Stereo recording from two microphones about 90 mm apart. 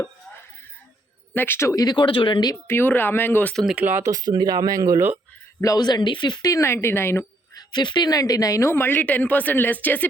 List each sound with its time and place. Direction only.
1.3 s a woman's voice: 25° left (ahead or behind)
1.7 s speech: 50° left (ahead or behind); by 2.4 s 70° left (ahead or behind)
2.6 s a woman's voice: 25° left (ahead or behind)
3.5 s speech: centre (ahead or behind)
3.8 s speech: 25° right (ahead or behind)
4.1 s speech: 45° right (ahead or behind)
5.6 s speech: 45° left (ahead or behind)
6.5 s a woman's voice: 35° left (ahead or behind)
7.5 s speech: 55° left (ahead or behind)
8.1 s a woman's voice: 40° left (ahead or behind); by 10.1 s 20° left (ahead or behind)